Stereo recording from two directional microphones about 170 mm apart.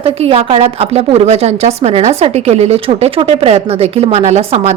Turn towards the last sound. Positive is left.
turn(degrees=-40)  # may be behind; listen again after turning